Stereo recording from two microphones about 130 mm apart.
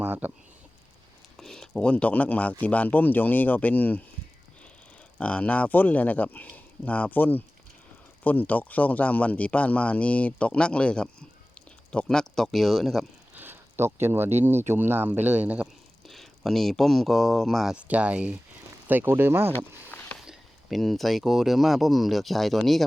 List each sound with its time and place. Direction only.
0.0 s a sound: 15° right (ahead or behind)
1.4 s speech: 5° left (ahead or behind)
5.1 s speech: 10° left (ahead or behind)
13.3 s speech: 15° right (ahead or behind)
19.5 s a sound: 10° left (ahead or behind)
20.1 s speech: centre (ahead or behind)